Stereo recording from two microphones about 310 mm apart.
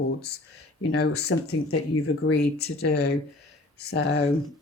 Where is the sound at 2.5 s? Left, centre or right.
Left.